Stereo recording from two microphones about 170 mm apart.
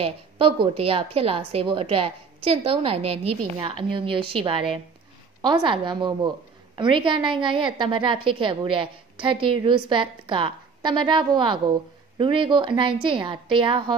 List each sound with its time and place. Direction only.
0.0 s a woman's voice: 35° right (ahead or behind)